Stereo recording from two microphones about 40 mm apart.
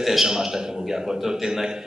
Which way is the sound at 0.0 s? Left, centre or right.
Centre.